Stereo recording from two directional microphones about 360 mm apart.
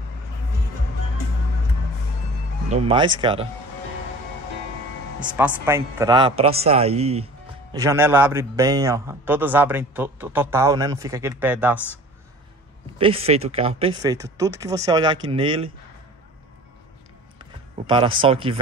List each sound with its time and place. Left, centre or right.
2.7 s a man's voice: centre
5.3 s a man's voice: centre
12.9 s a man's voice: centre
17.8 s a man's voice: centre